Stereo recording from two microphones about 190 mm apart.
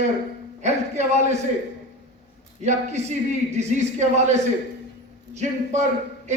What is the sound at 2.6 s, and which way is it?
Speech, 35° right (ahead or behind).